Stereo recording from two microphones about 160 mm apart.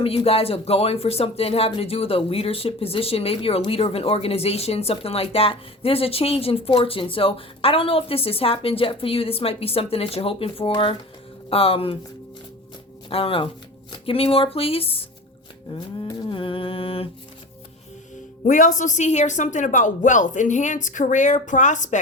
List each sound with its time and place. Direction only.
0.0 s speech: 35° left (ahead or behind)
13.1 s speech: 35° left (ahead or behind)
18.4 s speech: 55° left (ahead or behind)